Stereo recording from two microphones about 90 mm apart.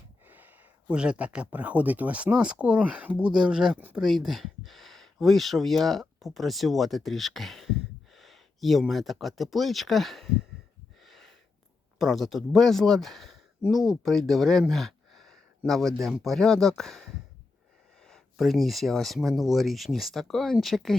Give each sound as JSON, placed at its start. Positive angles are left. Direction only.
{"t": 0.3, "sound": "speech", "side_deg": -20}
{"t": 11.0, "sound": "a sound", "side_deg": 0}
{"t": 11.9, "sound": "speech", "side_deg": 0}
{"t": 18.1, "sound": "speech", "side_deg": 0}